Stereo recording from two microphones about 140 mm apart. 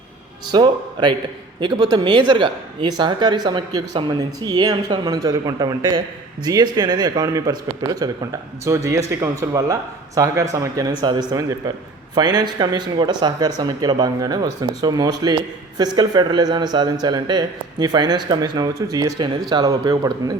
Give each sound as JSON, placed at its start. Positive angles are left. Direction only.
{"t": 0.5, "sound": "speech", "side_deg": -30}